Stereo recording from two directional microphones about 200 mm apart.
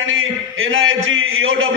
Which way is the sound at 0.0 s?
80° right.